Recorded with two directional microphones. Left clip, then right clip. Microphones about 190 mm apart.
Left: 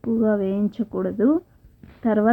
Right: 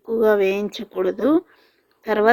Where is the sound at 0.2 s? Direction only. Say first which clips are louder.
Right 7 dB; 35° right (ahead or behind).